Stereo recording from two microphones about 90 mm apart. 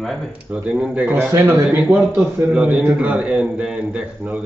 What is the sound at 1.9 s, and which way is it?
A man's voice, 15° right (ahead or behind).